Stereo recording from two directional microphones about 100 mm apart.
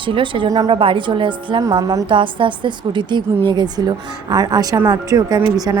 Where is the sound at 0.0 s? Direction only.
55° right (ahead or behind).